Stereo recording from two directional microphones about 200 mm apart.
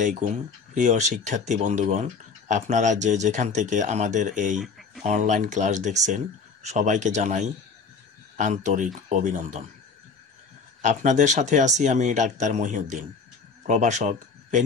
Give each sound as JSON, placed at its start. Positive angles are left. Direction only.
{"t": 0.0, "sound": "speech", "side_deg": -40}
{"t": 4.6, "sound": "a sound", "side_deg": 0}
{"t": 5.0, "sound": "speech", "side_deg": -35}
{"t": 10.8, "sound": "speech", "side_deg": -35}